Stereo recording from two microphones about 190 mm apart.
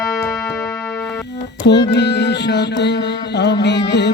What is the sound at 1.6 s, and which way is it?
Mantra, 65° left (ahead or behind).